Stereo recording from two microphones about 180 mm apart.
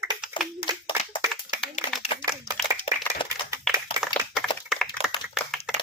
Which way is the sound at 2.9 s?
40° left (ahead or behind).